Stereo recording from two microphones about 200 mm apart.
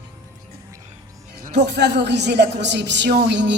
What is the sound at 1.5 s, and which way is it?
A woman's voice, 55° right (ahead or behind).